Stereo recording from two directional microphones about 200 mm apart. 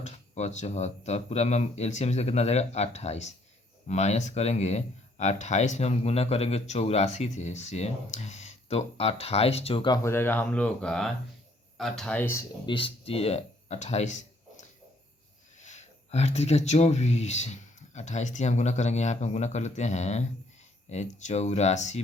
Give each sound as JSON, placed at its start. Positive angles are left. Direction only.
{"t": 0.0, "sound": "speech", "side_deg": 35}
{"t": 12.6, "sound": "speech", "side_deg": 25}